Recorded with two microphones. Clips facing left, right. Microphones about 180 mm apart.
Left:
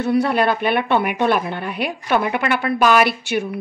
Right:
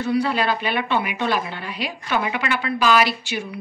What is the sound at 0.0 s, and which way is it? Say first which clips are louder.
A woman's voice: left 4 dB; 60° left (ahead or behind).